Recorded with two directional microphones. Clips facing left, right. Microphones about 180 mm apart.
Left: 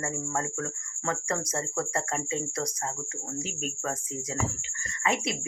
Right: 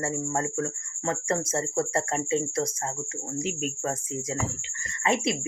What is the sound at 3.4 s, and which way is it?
Speech, 35° left (ahead or behind).